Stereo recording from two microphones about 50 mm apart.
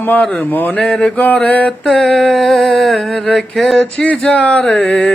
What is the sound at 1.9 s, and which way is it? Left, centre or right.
Music, centre.